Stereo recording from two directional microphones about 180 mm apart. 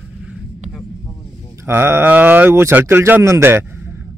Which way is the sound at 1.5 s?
15° right (ahead or behind).